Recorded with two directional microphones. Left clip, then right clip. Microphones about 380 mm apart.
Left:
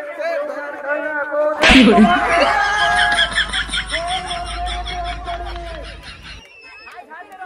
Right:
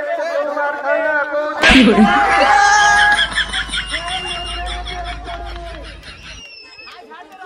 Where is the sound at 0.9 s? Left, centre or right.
Centre.